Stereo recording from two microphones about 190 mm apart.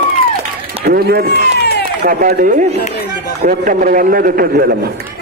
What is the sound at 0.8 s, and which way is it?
A man's voice, 55° right (ahead or behind).